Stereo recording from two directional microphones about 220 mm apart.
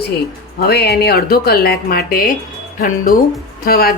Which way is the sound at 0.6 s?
45° left (ahead or behind).